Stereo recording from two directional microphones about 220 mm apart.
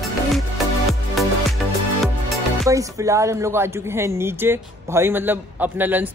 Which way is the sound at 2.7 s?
15° right (ahead or behind).